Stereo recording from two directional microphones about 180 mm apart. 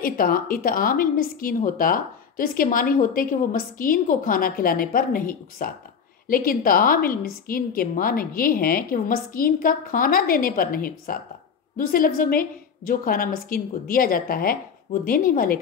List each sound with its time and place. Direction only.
0.0 s a woman's voice: 55° left (ahead or behind)